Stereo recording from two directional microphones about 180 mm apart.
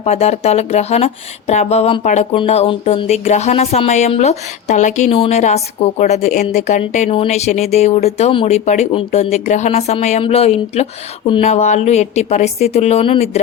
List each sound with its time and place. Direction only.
0.0 s a woman's voice: 35° left (ahead or behind)